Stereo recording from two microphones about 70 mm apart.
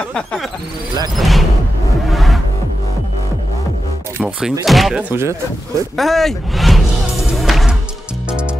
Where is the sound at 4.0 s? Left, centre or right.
Right.